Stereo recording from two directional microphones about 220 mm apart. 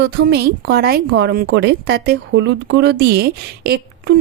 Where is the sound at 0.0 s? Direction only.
45° right (ahead or behind).